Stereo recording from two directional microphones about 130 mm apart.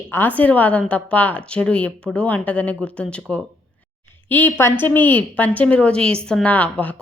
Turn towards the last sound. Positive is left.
turn(degrees=10)  # may be behind; listen again after turning